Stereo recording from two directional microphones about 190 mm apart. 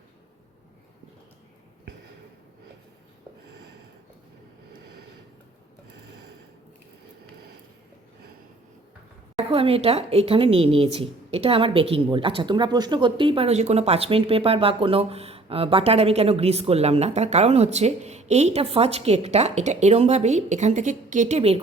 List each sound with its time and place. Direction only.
9.5 s speech: 30° right (ahead or behind)